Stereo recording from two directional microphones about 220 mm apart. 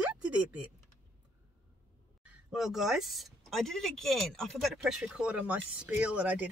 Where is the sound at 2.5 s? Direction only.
Centre (ahead or behind).